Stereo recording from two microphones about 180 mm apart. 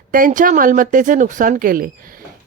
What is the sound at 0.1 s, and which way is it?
Speech, 50° right (ahead or behind).